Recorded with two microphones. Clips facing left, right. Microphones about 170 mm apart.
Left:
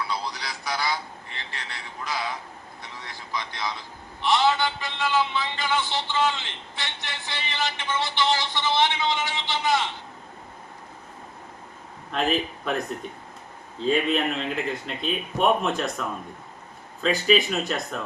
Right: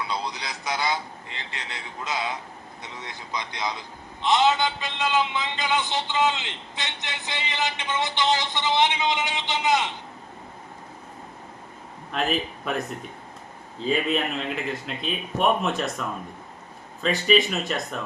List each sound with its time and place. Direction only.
0.0 s a sound: 20° right (ahead or behind)
2.8 s a man's voice: 20° right (ahead or behind)
12.1 s speech: centre (ahead or behind)
13.7 s speech: centre (ahead or behind)